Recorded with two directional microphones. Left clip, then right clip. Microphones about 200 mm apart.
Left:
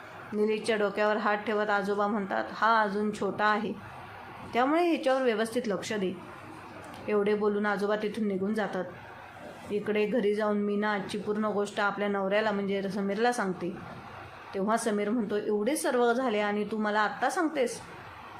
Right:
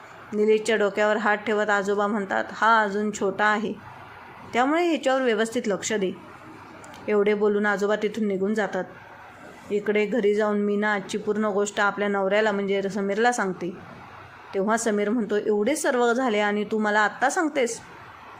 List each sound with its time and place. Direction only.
0.3 s speech: 20° right (ahead or behind)
7.1 s speech: 20° right (ahead or behind)